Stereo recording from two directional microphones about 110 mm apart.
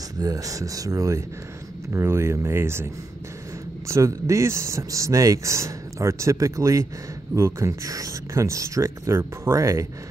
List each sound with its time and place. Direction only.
0.2 s speech: 30° right (ahead or behind)